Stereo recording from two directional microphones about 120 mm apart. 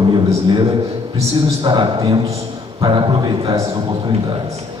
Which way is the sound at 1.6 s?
40° right (ahead or behind).